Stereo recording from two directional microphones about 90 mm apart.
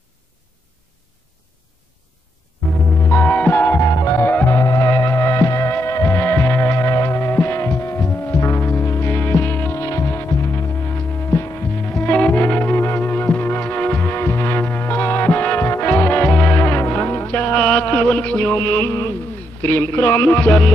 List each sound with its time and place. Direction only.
3.0 s music: 20° left (ahead or behind)
3.8 s music: 35° left (ahead or behind)
11.9 s music: 15° left (ahead or behind)
12.7 s music: 25° left (ahead or behind)
17.3 s mantra: 15° left (ahead or behind); by 19.1 s 30° left (ahead or behind)
19.6 s music: 25° left (ahead or behind)